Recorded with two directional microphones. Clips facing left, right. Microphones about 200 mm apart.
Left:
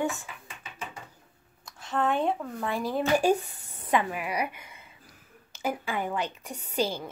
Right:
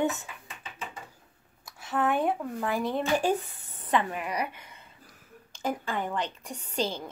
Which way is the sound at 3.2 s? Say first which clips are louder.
Left 3 dB; 10° left (ahead or behind).